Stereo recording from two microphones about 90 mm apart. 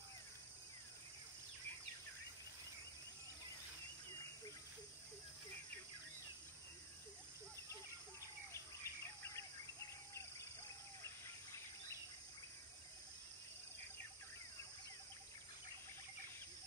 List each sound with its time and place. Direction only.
8.8 s bird vocalization: 30° left (ahead or behind)